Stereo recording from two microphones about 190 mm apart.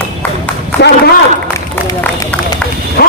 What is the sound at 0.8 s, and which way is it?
Speech, 60° left (ahead or behind).